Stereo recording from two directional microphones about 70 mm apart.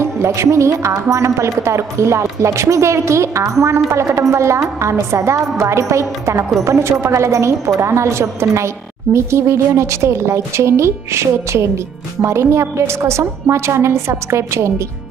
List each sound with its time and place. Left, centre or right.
0.0 s a woman's voice: right